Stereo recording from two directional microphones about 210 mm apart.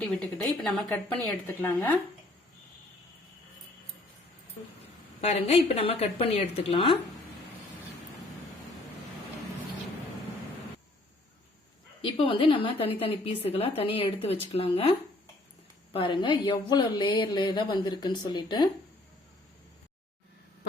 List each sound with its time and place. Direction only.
0.1 s speech: 5° left (ahead or behind)
5.2 s a woman's voice: 30° left (ahead or behind)
12.0 s a woman's voice: 25° left (ahead or behind)